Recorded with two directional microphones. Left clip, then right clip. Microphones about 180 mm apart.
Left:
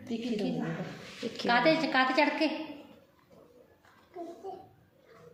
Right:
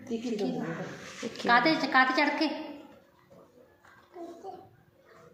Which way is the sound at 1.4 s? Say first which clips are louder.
Right 2 dB; 10° left (ahead or behind).